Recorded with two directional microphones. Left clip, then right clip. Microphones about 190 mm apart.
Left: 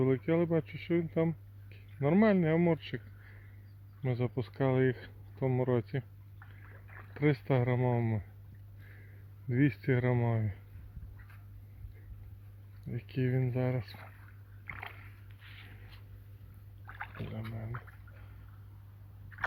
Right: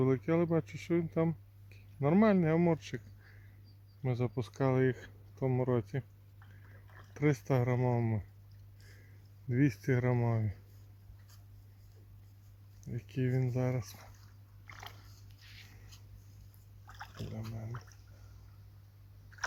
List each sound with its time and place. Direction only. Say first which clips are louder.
0.0 s speech: left 1 dB; 10° right (ahead or behind)
4.0 s speech: left 1 dB; 10° right (ahead or behind)
9.5 s speech: left 1 dB; 5° right (ahead or behind)
12.8 s speech: left 2 dB; 5° right (ahead or behind)
14.7 s a sound: left 6 dB; 10° right (ahead or behind)
16.8 s a sound: left 4 dB; 5° right (ahead or behind)
17.5 s speech: left 3 dB; 5° right (ahead or behind)